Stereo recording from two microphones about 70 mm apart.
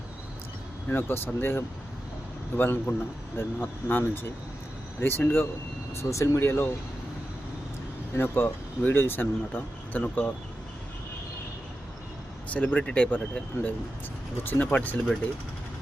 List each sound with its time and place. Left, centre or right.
0.9 s speech: left
5.9 s speech: left
8.1 s speech: left
12.5 s speech: centre